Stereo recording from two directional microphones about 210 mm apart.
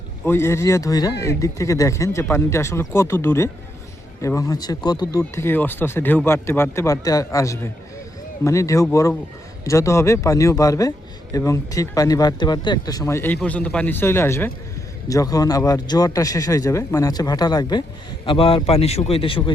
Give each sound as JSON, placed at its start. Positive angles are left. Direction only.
{"t": 0.3, "sound": "a man's voice", "side_deg": 10}